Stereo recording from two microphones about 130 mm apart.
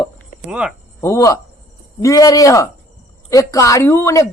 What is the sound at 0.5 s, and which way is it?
Speech, 5° right (ahead or behind).